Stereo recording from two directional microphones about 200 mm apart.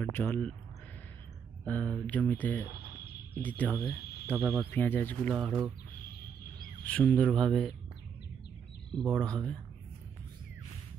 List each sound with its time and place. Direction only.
0.0 s speech: 10° left (ahead or behind)
1.6 s speech: 5° left (ahead or behind)
2.8 s music: 50° left (ahead or behind)
3.3 s speech: 10° left (ahead or behind)
4.0 s a sound: 50° left (ahead or behind)
4.3 s speech: 10° right (ahead or behind)
4.6 s speech: 10° left (ahead or behind)
5.3 s speech: 5° right (ahead or behind)
6.8 s speech: 5° left (ahead or behind)
9.2 s speech: 5° left (ahead or behind)